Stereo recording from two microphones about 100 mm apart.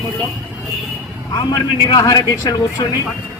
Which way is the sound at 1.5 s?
40° left (ahead or behind).